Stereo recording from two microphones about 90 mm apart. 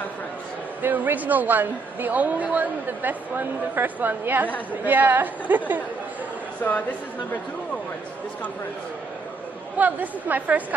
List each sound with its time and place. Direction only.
0.8 s a woman's voice: 20° right (ahead or behind)
9.8 s a woman's voice: 20° right (ahead or behind)